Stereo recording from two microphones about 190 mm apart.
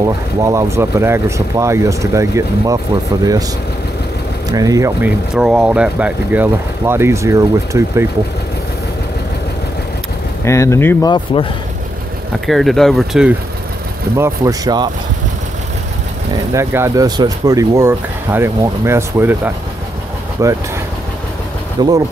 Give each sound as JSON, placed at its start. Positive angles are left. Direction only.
{"t": 0.0, "sound": "speech", "side_deg": -15}
{"t": 4.5, "sound": "speech", "side_deg": -20}
{"t": 5.3, "sound": "speech", "side_deg": -5}
{"t": 10.4, "sound": "speech", "side_deg": 15}
{"t": 12.4, "sound": "speech", "side_deg": 0}
{"t": 14.1, "sound": "speech", "side_deg": -15}
{"t": 16.5, "sound": "speech", "side_deg": -15}
{"t": 21.8, "sound": "speech", "side_deg": -20}